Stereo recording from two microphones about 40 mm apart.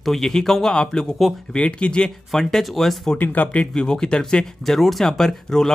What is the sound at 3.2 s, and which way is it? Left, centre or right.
Speech, left.